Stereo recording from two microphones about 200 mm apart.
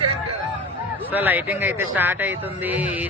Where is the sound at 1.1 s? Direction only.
10° right (ahead or behind).